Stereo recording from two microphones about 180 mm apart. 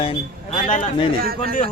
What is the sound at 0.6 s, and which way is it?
Speech, 45° left (ahead or behind).